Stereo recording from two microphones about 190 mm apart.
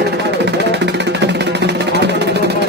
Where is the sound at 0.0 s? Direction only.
60° right (ahead or behind).